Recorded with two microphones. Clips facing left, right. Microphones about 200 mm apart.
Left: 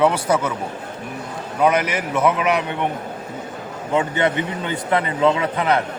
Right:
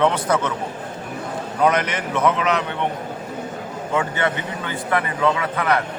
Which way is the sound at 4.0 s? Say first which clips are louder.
Left 3 dB; 20° left (ahead or behind).